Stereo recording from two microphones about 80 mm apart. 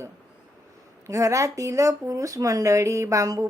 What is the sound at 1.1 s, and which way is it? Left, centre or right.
Speech, right.